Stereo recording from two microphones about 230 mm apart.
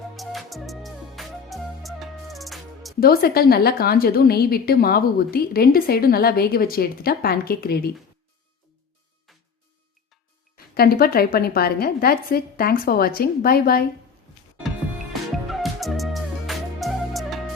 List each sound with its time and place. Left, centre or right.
0.2 s music: centre
3.0 s a woman's voice: left
10.8 s a woman's voice: left
15.4 s music: centre